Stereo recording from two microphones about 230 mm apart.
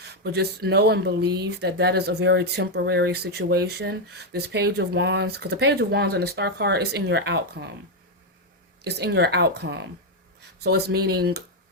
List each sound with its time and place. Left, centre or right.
0.0 s speech: right
8.8 s speech: right